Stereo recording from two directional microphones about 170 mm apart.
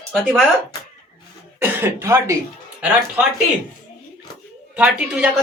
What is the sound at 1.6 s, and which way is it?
Speech, 15° right (ahead or behind).